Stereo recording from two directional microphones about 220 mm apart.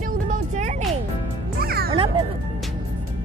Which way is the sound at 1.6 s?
45° right (ahead or behind).